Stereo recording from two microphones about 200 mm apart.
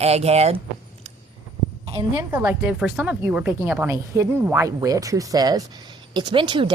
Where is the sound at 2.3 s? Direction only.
10° right (ahead or behind).